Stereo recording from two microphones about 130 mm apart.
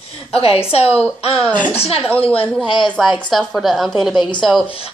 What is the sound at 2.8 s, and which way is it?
A woman's voice, centre (ahead or behind).